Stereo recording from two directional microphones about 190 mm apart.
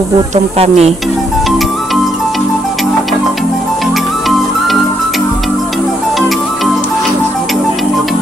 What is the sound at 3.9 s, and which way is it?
Music, centre (ahead or behind).